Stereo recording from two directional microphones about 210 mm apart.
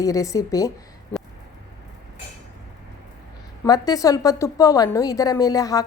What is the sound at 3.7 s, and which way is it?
A woman's voice, 15° left (ahead or behind).